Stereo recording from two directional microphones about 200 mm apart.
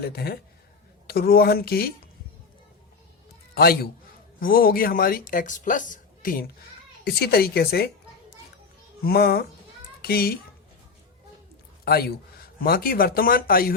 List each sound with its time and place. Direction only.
0.0 s a woman's voice: 50° left (ahead or behind)
3.5 s a man's voice: 50° left (ahead or behind)
9.0 s a woman's voice: 50° left (ahead or behind)
11.9 s a woman's voice: 50° left (ahead or behind)